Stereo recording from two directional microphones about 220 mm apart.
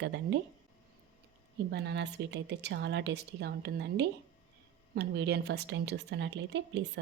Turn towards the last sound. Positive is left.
turn(degrees=-50)  # may be behind; listen again after turning